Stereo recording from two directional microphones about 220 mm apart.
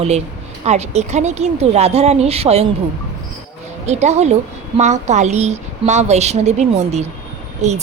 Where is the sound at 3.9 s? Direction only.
30° right (ahead or behind).